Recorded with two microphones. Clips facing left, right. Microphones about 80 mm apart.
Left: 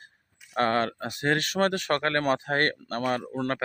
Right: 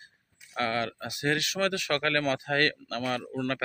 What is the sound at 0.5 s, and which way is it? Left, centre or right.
Speech, left.